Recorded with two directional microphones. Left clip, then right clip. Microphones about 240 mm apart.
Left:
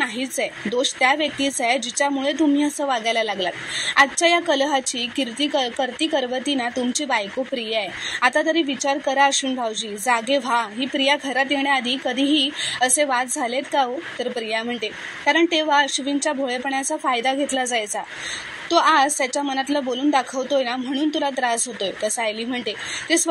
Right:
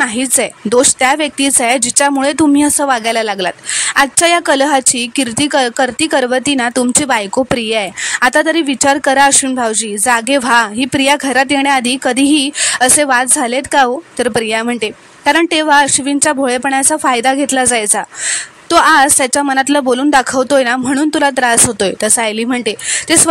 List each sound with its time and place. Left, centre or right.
0.0 s a woman's voice: right